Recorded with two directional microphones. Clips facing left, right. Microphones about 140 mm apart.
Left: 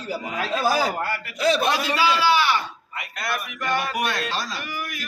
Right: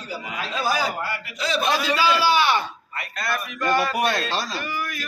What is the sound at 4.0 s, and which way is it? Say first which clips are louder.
Speech: right 3 dB; 30° right (ahead or behind).